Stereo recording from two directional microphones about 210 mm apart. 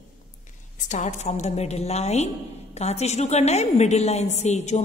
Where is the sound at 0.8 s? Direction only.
35° left (ahead or behind).